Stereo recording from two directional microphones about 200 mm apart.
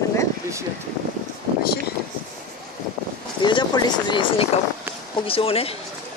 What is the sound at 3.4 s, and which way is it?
Speech, 20° left (ahead or behind).